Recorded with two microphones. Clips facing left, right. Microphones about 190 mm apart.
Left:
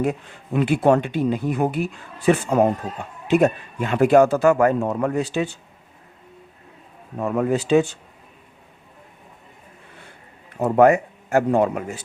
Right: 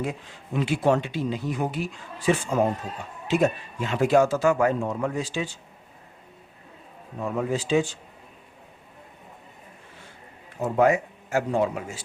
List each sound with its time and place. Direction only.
0.0 s speech: 55° left (ahead or behind)
7.2 s speech: 60° left (ahead or behind)
10.6 s speech: 60° left (ahead or behind)